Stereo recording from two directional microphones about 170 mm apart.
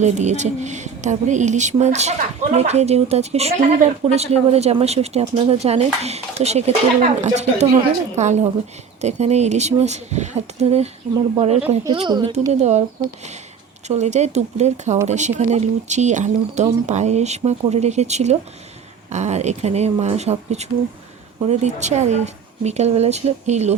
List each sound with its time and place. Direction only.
0.0 s speech: 45° right (ahead or behind)
12.5 s speech: 40° right (ahead or behind)
13.8 s speech: 40° right (ahead or behind)